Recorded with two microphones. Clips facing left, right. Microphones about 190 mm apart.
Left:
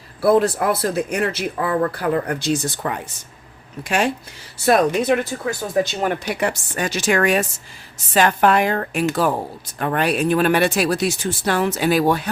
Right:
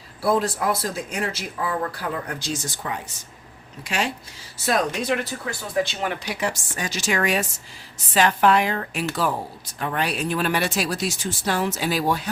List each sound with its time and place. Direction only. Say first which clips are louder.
0.2 s speech: left 6 dB; 60° left (ahead or behind)
5.3 s speech: left 5 dB; 45° left (ahead or behind); by 12.3 s 60° left (ahead or behind)